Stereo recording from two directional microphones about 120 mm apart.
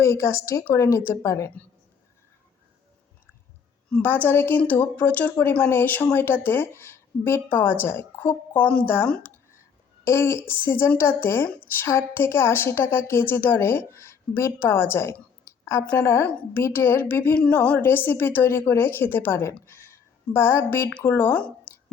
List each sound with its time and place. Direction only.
0.0 s speech: 20° left (ahead or behind)
3.8 s a woman's voice: 10° left (ahead or behind)